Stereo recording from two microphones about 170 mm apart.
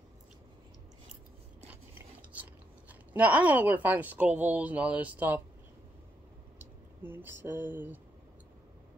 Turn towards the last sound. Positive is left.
turn(degrees=-10)  # may be behind; listen again after turning